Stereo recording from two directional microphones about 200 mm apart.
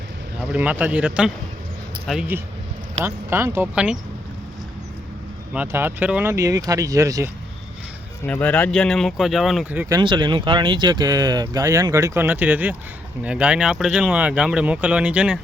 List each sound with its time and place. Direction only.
0.5 s speech: 5° right (ahead or behind)
5.5 s speech: 10° right (ahead or behind)
8.2 s speech: 5° left (ahead or behind)
9.9 s speech: 25° right (ahead or behind); by 15.4 s 5° right (ahead or behind)